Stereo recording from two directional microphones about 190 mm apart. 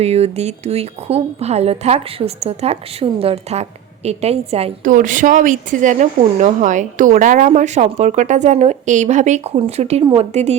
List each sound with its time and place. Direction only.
0.0 s a woman's voice: 35° right (ahead or behind)